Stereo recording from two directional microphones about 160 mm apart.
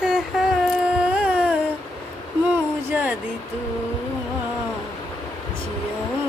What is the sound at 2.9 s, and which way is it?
Speech, 10° right (ahead or behind).